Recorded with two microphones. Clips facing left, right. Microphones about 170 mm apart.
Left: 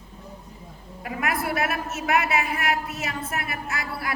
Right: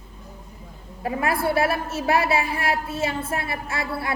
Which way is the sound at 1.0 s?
30° right (ahead or behind).